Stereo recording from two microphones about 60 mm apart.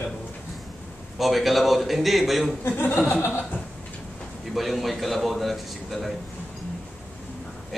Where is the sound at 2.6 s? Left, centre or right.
Left.